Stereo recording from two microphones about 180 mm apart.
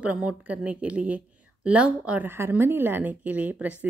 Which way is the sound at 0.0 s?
5° right (ahead or behind).